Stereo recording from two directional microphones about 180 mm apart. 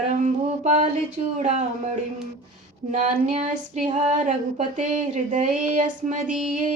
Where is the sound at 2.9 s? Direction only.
40° right (ahead or behind).